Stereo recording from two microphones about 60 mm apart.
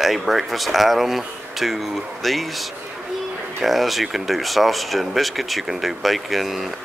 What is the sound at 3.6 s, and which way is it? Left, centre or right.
Speech, centre.